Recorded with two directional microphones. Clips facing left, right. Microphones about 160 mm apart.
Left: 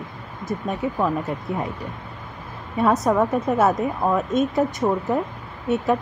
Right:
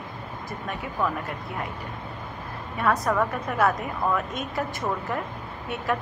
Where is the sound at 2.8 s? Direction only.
20° left (ahead or behind).